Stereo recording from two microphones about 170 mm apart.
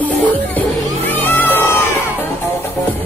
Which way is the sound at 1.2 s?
10° left (ahead or behind).